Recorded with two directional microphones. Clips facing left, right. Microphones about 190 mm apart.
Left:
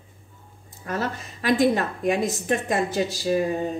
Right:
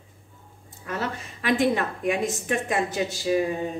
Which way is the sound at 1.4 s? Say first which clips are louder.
Left 2 dB; 40° left (ahead or behind).